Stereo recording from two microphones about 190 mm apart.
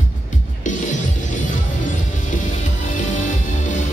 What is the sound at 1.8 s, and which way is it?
Music, 40° left (ahead or behind).